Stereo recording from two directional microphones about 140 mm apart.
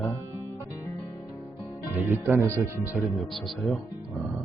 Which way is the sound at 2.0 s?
15° right (ahead or behind).